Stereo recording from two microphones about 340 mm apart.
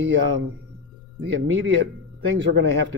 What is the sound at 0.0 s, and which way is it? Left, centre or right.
Speech, right.